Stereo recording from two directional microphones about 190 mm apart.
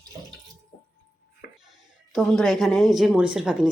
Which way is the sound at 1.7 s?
Centre (ahead or behind).